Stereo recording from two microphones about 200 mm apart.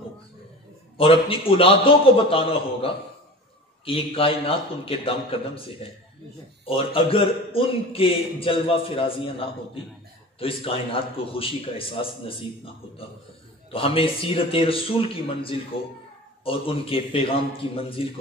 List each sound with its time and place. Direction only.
0.9 s a man's voice: 25° left (ahead or behind)
13.7 s a man's voice: 25° left (ahead or behind)